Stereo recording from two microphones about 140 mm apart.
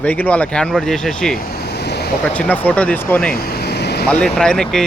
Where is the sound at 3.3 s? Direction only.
90° left.